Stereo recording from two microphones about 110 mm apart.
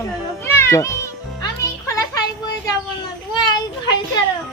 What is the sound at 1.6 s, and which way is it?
Music, 30° left (ahead or behind).